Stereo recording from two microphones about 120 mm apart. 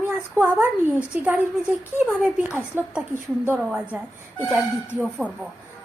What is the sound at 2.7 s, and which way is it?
Speech, 15° right (ahead or behind).